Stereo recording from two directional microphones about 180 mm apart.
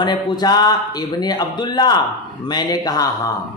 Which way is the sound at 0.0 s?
25° left (ahead or behind).